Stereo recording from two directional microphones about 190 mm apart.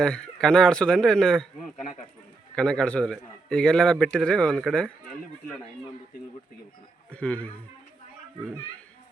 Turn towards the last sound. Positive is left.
turn(degrees=5)  # may be behind; listen again after turning